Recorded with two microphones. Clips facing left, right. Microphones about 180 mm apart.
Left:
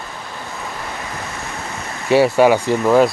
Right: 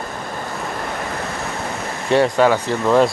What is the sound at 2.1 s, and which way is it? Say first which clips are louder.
Speech: left 3 dB; 5° left (ahead or behind).